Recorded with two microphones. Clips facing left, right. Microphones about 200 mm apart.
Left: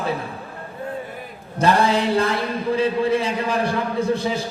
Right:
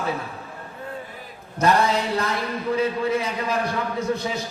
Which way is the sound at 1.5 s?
30° left (ahead or behind).